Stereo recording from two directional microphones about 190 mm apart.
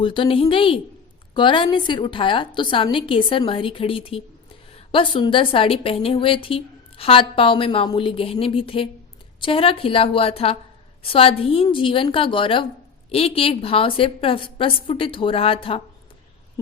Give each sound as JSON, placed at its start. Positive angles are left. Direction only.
{"t": 0.0, "sound": "a woman's voice", "side_deg": 25}